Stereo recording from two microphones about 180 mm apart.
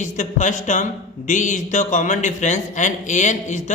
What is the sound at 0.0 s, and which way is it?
A woman's voice, 45° left (ahead or behind).